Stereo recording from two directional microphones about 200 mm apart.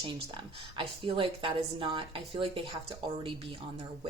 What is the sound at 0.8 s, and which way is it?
A woman's voice, 25° right (ahead or behind).